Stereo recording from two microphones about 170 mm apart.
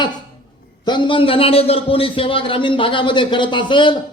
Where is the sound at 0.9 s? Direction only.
30° left (ahead or behind).